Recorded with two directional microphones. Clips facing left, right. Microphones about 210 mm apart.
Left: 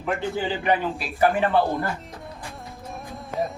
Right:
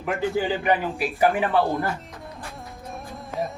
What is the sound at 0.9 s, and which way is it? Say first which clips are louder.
Speech: even; 15° right (ahead or behind).